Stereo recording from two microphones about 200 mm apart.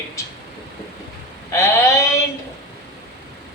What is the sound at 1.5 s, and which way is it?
Speech, 15° left (ahead or behind).